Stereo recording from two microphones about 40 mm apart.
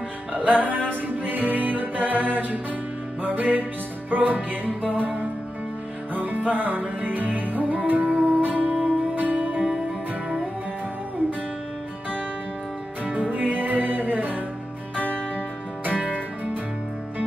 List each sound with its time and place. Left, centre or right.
0.3 s music: right
6.1 s music: right
13.3 s music: right